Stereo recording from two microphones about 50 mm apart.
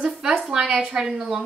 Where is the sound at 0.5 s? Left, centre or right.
Right.